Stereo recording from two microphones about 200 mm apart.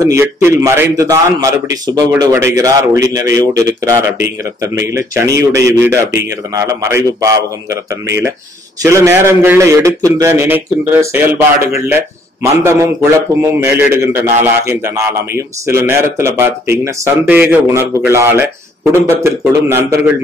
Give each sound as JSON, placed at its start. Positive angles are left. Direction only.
{"t": 0.0, "sound": "a man's voice", "side_deg": -15}